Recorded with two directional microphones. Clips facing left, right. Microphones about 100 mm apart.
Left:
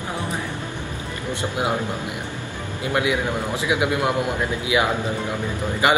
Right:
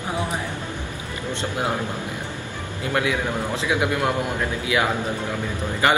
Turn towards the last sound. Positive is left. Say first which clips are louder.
# left 1 dB
turn(degrees=15)  # may be behind; listen again after turning